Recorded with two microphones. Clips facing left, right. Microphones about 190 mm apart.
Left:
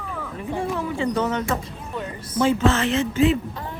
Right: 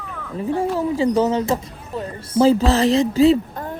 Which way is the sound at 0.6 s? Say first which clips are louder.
Right 5 dB; 35° right (ahead or behind).